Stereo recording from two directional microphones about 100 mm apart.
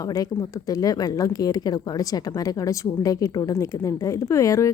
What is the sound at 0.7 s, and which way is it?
Speech, 40° left (ahead or behind).